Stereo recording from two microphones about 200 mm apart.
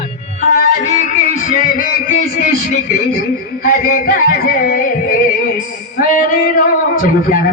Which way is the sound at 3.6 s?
45° left (ahead or behind).